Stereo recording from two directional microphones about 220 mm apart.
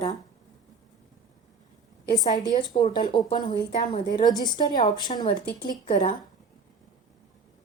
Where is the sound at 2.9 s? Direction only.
20° left (ahead or behind).